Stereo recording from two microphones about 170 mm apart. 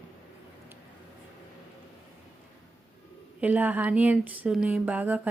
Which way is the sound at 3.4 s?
10° right (ahead or behind).